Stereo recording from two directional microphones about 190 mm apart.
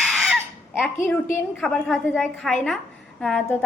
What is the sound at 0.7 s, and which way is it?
A woman's voice, 10° left (ahead or behind).